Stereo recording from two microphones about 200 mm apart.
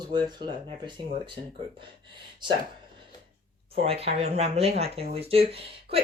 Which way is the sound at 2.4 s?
25° right (ahead or behind).